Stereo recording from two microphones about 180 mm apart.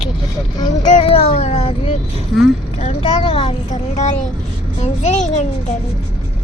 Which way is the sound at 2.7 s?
35° left (ahead or behind).